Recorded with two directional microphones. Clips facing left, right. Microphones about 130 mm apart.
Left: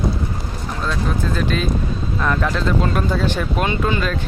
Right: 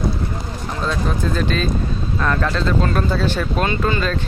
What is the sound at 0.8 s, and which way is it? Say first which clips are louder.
Speech: right 1 dB; centre (ahead or behind).